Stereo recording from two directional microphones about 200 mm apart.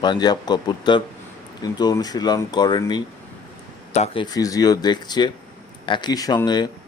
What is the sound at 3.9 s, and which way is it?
Speech, 30° left (ahead or behind).